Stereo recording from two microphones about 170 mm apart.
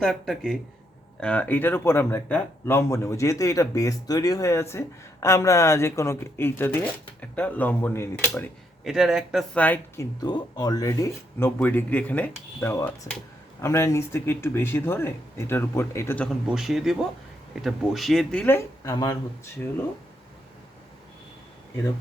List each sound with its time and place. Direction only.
0.0 s speech: centre (ahead or behind)
8.8 s speech: centre (ahead or behind)
9.6 s speech: 10° left (ahead or behind)
16.6 s speech: centre (ahead or behind)